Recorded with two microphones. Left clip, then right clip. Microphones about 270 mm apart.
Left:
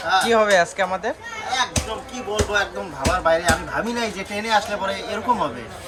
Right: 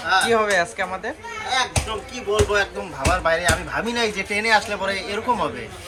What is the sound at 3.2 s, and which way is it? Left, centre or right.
A man's voice, centre.